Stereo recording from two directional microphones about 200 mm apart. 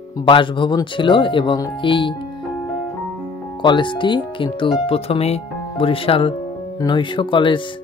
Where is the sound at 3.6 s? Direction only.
25° left (ahead or behind).